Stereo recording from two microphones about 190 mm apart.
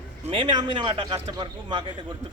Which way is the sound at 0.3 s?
25° right (ahead or behind).